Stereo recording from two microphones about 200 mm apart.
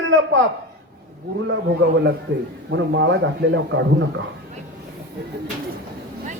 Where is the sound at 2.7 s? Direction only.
65° right (ahead or behind).